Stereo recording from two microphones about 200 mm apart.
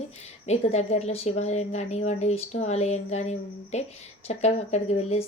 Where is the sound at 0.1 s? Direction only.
35° left (ahead or behind).